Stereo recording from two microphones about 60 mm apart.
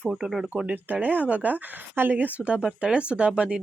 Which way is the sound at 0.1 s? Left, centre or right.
Centre.